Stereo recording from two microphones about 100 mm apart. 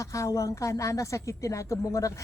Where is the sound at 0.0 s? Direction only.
30° left (ahead or behind).